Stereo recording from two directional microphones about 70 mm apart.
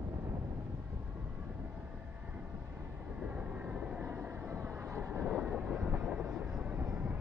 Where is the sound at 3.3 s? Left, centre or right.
Centre.